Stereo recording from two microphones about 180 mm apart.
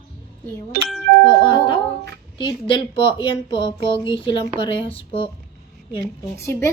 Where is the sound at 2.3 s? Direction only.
25° left (ahead or behind).